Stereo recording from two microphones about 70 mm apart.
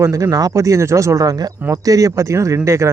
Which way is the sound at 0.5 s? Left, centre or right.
Right.